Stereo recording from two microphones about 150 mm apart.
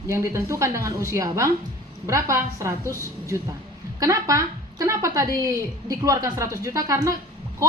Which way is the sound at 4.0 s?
20° right (ahead or behind).